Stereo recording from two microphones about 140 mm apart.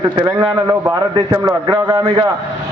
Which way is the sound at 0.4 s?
20° right (ahead or behind).